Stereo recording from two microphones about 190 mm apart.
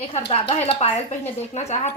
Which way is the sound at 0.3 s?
30° left (ahead or behind).